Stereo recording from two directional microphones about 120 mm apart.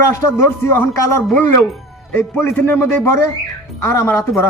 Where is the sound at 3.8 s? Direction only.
20° left (ahead or behind).